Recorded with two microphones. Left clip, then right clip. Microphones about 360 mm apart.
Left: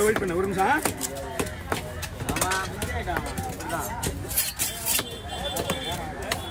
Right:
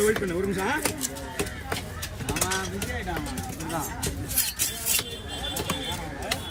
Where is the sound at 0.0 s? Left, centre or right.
Centre.